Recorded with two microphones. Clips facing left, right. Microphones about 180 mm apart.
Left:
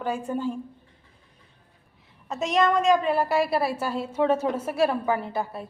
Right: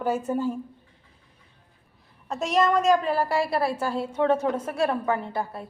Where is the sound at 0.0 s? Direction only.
5° right (ahead or behind).